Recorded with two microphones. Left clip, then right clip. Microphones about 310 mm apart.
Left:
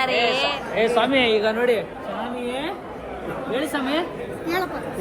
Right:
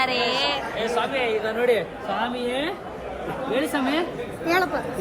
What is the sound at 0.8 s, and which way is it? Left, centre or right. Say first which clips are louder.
Speech: left 9 dB; left.